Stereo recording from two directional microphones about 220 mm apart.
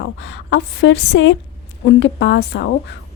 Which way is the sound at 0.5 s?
55° left (ahead or behind).